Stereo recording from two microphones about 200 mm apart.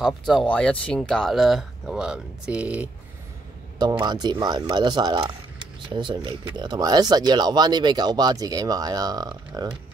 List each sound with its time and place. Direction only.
0.0 s speech: centre (ahead or behind)
3.8 s speech: 20° right (ahead or behind)